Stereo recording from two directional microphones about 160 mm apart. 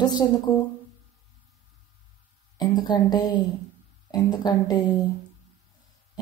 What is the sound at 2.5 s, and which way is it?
A woman's voice, 25° left (ahead or behind).